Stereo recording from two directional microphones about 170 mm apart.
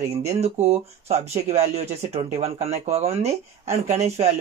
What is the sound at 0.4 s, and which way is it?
Speech, 40° right (ahead or behind).